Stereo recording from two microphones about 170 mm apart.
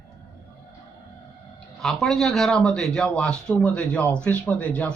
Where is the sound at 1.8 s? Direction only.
Centre (ahead or behind).